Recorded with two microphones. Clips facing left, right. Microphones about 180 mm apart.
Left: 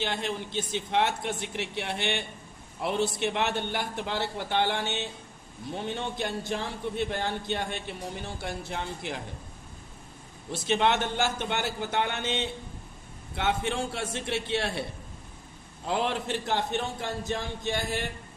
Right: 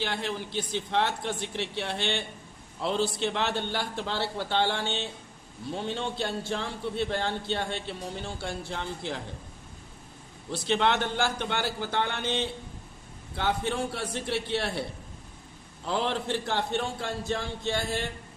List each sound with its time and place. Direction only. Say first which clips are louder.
0.0 s a man's voice: even; 20° left (ahead or behind)
10.5 s a man's voice: even; 20° left (ahead or behind)
15.9 s a man's voice: even; 15° left (ahead or behind)